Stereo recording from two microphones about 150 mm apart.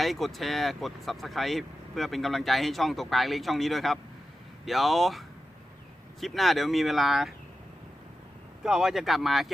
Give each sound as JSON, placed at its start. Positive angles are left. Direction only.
{"t": 0.0, "sound": "speech", "side_deg": 0}
{"t": 8.6, "sound": "speech", "side_deg": -5}